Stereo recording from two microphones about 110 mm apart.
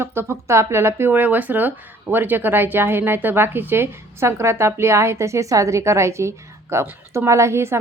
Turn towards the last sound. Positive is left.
turn(degrees=-25)  # may be behind; listen again after turning